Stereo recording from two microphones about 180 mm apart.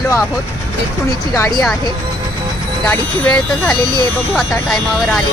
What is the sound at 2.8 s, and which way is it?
Speech, 10° left (ahead or behind).